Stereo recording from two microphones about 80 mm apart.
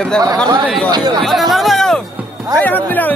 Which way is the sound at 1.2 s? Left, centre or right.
Centre.